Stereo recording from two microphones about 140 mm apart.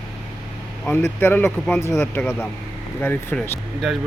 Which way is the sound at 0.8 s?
10° left (ahead or behind).